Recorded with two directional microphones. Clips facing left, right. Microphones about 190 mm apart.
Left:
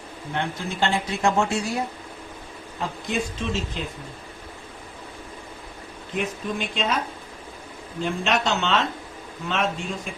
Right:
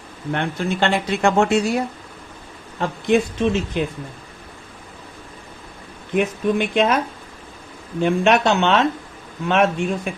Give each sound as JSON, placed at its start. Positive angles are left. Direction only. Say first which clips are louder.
{"t": 0.3, "sound": "speech", "louder": "right 4 dB", "side_deg": -65}
{"t": 2.8, "sound": "speech", "louder": "right 9 dB", "side_deg": -60}
{"t": 6.1, "sound": "speech", "louder": "right 9 dB", "side_deg": -60}
{"t": 8.0, "sound": "speech", "louder": "right 8 dB", "side_deg": -60}